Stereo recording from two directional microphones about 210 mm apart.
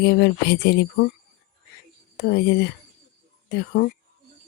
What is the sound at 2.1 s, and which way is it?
Speech, 50° left (ahead or behind).